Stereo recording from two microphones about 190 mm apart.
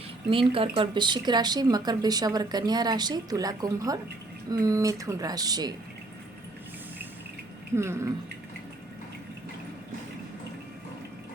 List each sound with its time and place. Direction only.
0.3 s speech: 30° right (ahead or behind)
7.8 s speech: 15° right (ahead or behind)